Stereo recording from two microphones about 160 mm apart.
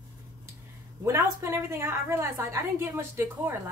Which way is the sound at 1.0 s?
20° right (ahead or behind).